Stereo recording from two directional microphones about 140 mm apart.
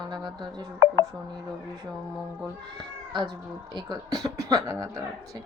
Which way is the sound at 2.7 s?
30° right (ahead or behind).